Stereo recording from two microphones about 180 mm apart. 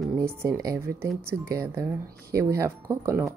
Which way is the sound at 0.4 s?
15° right (ahead or behind).